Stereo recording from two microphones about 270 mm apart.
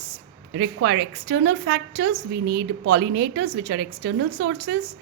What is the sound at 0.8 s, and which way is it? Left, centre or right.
A woman's voice, right.